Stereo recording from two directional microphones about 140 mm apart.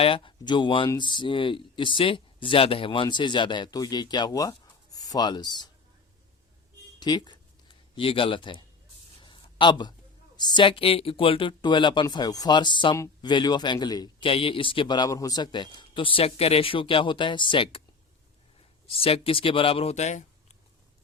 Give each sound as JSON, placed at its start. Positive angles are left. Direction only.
{"t": 0.0, "sound": "speech", "side_deg": 40}
{"t": 7.0, "sound": "a sound", "side_deg": 30}
{"t": 10.3, "sound": "a man's voice", "side_deg": 30}
{"t": 14.3, "sound": "speech", "side_deg": 40}
{"t": 18.9, "sound": "speech", "side_deg": 45}